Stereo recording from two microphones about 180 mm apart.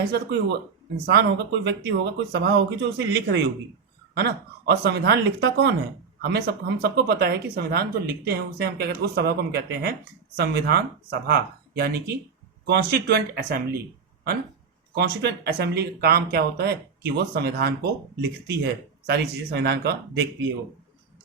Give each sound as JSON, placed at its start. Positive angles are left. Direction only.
{"t": 0.1, "sound": "speech", "side_deg": -70}
{"t": 14.9, "sound": "speech", "side_deg": -65}